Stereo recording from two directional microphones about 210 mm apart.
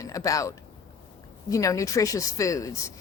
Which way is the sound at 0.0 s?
15° left (ahead or behind).